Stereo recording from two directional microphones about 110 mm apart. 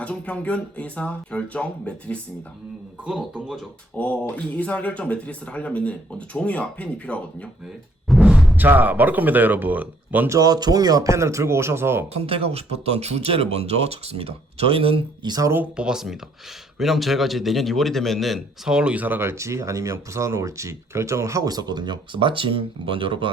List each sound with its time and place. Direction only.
0.0 s speech: 10° left (ahead or behind)
3.0 s speech: 5° right (ahead or behind)
3.9 s speech: 15° left (ahead or behind)
8.0 s a sound: centre (ahead or behind)
8.5 s speech: 15° right (ahead or behind)
10.2 s a man's voice: 30° right (ahead or behind)
12.1 s speech: 65° right (ahead or behind)
15.3 s speech: 30° right (ahead or behind)
15.7 s a man's voice: 5° right (ahead or behind); by 23.3 s 50° right (ahead or behind)